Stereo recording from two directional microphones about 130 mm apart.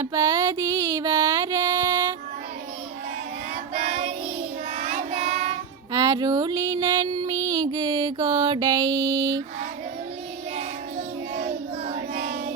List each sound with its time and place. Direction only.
0.0 s mantra: 25° right (ahead or behind)
3.8 s child singing: 55° right (ahead or behind)
5.9 s a sound: 30° right (ahead or behind)
10.9 s child singing: 90° right